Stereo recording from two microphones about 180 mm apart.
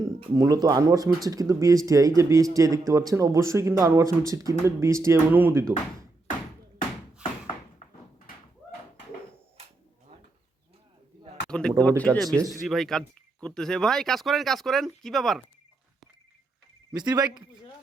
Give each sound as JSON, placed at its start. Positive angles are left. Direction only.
{"t": 0.3, "sound": "speech", "side_deg": -20}
{"t": 11.4, "sound": "a sound", "side_deg": 5}
{"t": 11.8, "sound": "speech", "side_deg": 5}
{"t": 16.9, "sound": "speech", "side_deg": -25}